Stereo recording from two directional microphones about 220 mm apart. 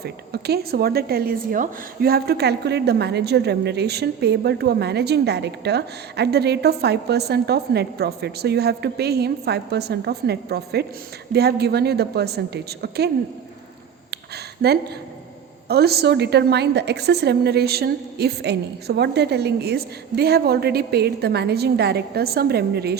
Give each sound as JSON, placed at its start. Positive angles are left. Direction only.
{"t": 0.0, "sound": "a woman's voice", "side_deg": -45}
{"t": 14.6, "sound": "a woman's voice", "side_deg": -50}